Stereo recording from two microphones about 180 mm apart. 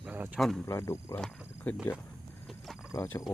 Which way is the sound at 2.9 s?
10° left (ahead or behind).